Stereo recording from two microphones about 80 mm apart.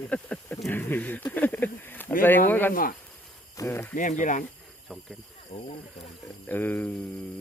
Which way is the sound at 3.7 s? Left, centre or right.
Left.